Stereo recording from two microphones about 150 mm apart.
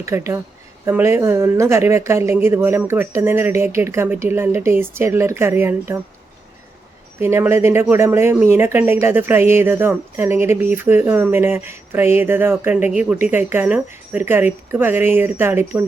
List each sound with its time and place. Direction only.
0.0 s speech: 20° right (ahead or behind)
7.2 s speech: 15° right (ahead or behind)